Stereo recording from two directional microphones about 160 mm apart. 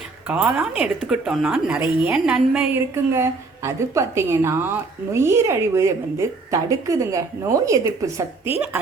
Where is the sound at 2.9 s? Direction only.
15° right (ahead or behind).